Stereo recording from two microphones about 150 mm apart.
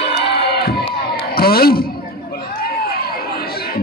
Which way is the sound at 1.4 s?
90° left.